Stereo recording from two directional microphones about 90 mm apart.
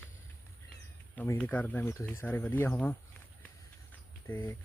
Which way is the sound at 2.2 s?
20° left (ahead or behind).